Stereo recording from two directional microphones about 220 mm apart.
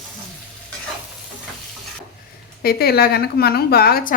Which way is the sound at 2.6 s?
45° left (ahead or behind).